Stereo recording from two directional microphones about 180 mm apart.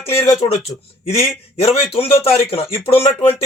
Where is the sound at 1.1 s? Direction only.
35° left (ahead or behind).